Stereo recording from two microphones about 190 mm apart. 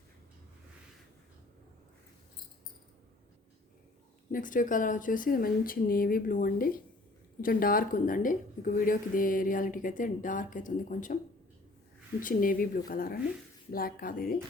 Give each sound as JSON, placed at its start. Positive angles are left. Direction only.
{"t": 4.3, "sound": "speech", "side_deg": 45}
{"t": 12.2, "sound": "speech", "side_deg": 45}